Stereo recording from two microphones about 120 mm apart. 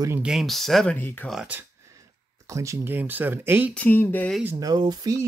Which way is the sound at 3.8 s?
15° left (ahead or behind).